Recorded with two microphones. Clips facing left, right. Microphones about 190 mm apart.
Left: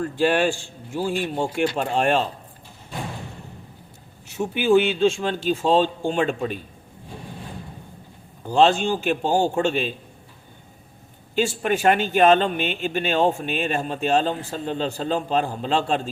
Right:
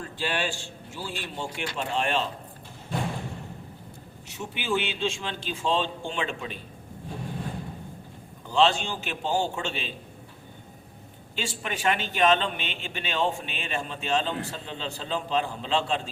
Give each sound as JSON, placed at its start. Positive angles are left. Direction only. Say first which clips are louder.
{"t": 0.0, "sound": "speech", "louder": "left 10 dB", "side_deg": 50}
{"t": 4.4, "sound": "speech", "louder": "left 11 dB", "side_deg": 50}
{"t": 8.4, "sound": "speech", "louder": "left 6 dB", "side_deg": 45}
{"t": 11.3, "sound": "speech", "louder": "left 11 dB", "side_deg": 45}